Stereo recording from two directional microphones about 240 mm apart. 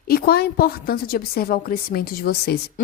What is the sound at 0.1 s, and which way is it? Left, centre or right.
A woman's voice, left.